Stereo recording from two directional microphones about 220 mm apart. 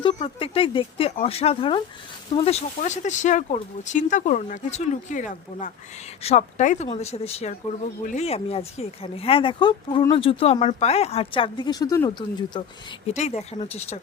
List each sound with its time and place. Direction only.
0.0 s speech: 25° left (ahead or behind)
13.1 s speech: 30° left (ahead or behind)